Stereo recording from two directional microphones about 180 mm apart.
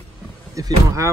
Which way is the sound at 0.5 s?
20° right (ahead or behind).